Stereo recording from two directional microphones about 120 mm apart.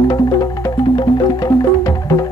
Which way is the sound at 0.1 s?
35° left (ahead or behind).